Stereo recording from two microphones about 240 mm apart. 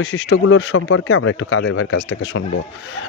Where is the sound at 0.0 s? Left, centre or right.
Left.